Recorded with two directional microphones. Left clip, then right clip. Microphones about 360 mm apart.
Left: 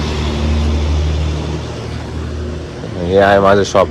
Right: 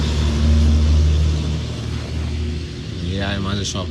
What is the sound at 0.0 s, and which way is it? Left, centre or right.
Vehicle, left.